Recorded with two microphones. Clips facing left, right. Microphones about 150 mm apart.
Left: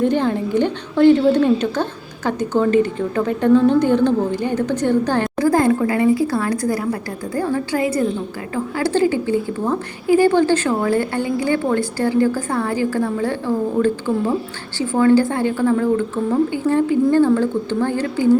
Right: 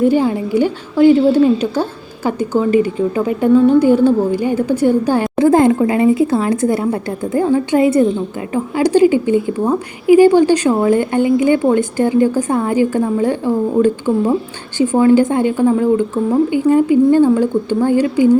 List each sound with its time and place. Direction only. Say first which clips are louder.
0.0 s a woman's voice: right 4 dB; 5° right (ahead or behind)
5.4 s a woman's voice: right 5 dB; 25° right (ahead or behind)